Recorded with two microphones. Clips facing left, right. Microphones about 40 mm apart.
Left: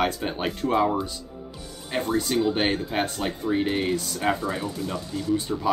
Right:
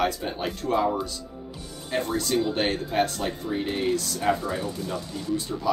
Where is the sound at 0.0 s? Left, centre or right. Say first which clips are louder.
Left 1 dB; left.